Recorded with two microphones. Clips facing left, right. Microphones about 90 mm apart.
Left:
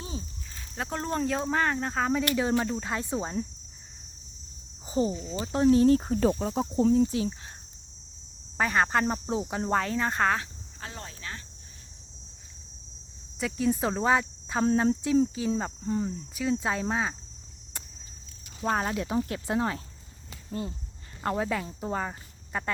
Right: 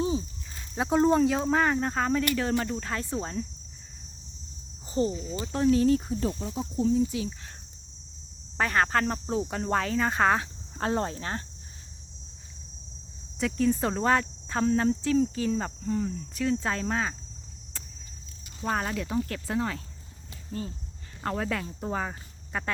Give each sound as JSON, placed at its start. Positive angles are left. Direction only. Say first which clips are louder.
{"t": 0.0, "sound": "snake", "louder": "right 11 dB", "side_deg": -20}
{"t": 0.8, "sound": "speech", "louder": "right 8 dB", "side_deg": -10}
{"t": 2.8, "sound": "speech", "louder": "left 1 dB", "side_deg": 15}
{"t": 4.9, "sound": "speech", "louder": "even", "side_deg": 15}
{"t": 5.4, "sound": "speech", "louder": "left 2 dB", "side_deg": 25}
{"t": 6.1, "sound": "cricket", "louder": "left 5 dB", "side_deg": 75}
{"t": 7.0, "sound": "speech", "louder": "left 2 dB", "side_deg": 35}
{"t": 8.5, "sound": "speech", "louder": "even", "side_deg": 5}
{"t": 10.9, "sound": "speech", "louder": "right 10 dB", "side_deg": -40}
{"t": 13.4, "sound": "speech", "louder": "right 1 dB", "side_deg": 5}
{"t": 15.8, "sound": "speech", "louder": "even", "side_deg": 20}
{"t": 18.6, "sound": "speech", "louder": "left 2 dB", "side_deg": 20}
{"t": 21.2, "sound": "speech", "louder": "left 1 dB", "side_deg": 10}